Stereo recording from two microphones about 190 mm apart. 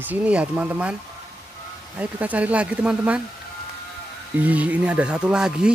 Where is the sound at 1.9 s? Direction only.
10° right (ahead or behind).